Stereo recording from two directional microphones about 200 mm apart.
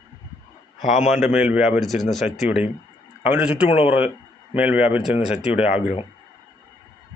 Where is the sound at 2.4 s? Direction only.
35° left (ahead or behind).